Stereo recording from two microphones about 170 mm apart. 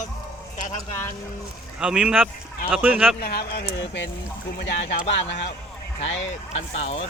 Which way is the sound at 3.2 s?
65° left (ahead or behind).